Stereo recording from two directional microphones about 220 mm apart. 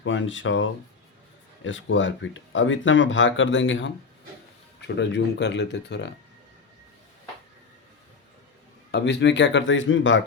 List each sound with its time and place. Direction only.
0.0 s speech: 60° left (ahead or behind)
4.9 s speech: 55° left (ahead or behind)
8.9 s speech: 55° left (ahead or behind)